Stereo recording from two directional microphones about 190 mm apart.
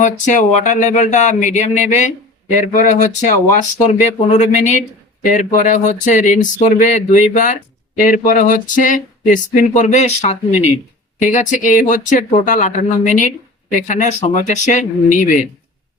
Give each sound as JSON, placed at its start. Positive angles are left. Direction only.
{"t": 0.0, "sound": "speech", "side_deg": 40}